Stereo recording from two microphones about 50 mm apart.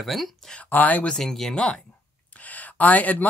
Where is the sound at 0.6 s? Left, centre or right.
Left.